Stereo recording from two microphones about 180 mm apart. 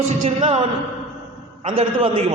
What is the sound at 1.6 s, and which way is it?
Speech, 35° right (ahead or behind).